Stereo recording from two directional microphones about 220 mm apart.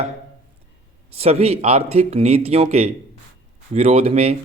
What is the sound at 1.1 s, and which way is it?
Speech, 30° right (ahead or behind).